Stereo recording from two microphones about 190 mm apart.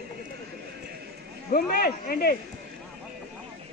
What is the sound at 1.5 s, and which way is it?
Speech, 50° left (ahead or behind).